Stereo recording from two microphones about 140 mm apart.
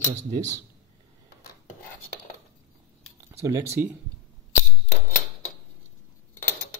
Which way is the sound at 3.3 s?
20° right (ahead or behind).